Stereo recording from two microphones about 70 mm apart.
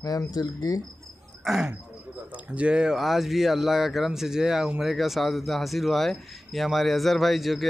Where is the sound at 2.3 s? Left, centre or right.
Centre.